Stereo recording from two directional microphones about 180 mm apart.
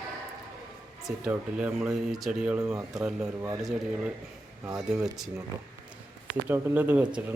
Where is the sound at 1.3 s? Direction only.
5° right (ahead or behind).